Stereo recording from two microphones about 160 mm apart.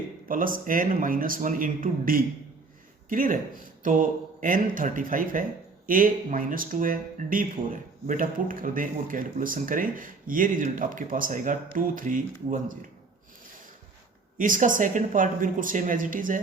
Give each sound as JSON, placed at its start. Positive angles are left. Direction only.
{"t": 0.3, "sound": "a man's voice", "side_deg": -60}
{"t": 14.3, "sound": "a man's voice", "side_deg": -55}